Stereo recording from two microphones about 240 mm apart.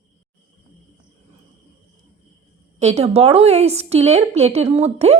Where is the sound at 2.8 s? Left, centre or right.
Right.